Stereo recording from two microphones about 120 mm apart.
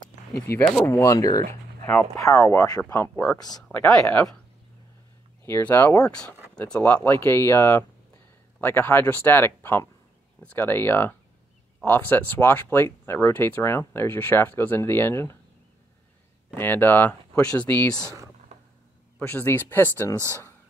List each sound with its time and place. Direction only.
0.3 s speech: 20° left (ahead or behind)
1.5 s a sound: 15° left (ahead or behind)
2.1 s speech: 25° left (ahead or behind)
3.9 s speech: 10° left (ahead or behind)
5.4 s speech: 15° left (ahead or behind)
16.5 s speech: 15° left (ahead or behind)
19.1 s speech: 15° left (ahead or behind)